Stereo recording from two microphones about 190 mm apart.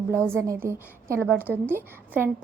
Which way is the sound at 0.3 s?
15° right (ahead or behind).